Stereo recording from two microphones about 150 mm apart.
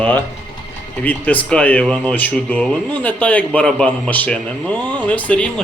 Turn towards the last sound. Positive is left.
turn(degrees=10)  # may be behind; listen again after turning